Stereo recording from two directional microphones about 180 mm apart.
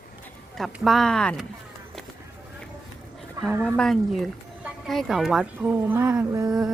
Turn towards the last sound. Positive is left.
turn(degrees=-20)  # may be behind; listen again after turning